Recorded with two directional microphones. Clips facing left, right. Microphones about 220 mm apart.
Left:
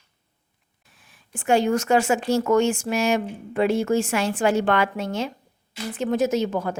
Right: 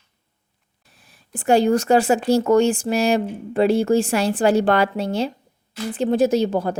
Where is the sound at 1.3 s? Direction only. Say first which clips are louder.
Right 4 dB; 35° right (ahead or behind).